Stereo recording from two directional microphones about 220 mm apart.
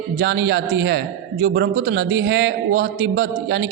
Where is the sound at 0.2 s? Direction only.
50° right (ahead or behind).